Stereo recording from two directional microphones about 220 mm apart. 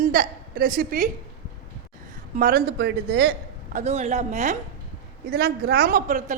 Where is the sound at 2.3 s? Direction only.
40° right (ahead or behind).